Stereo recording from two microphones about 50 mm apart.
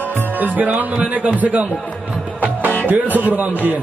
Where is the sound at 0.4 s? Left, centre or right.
Right.